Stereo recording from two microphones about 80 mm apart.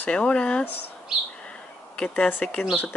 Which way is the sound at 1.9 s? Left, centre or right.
Centre.